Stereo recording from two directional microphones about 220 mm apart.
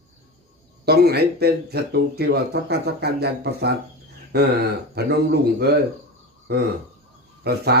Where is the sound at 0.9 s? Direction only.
45° right (ahead or behind).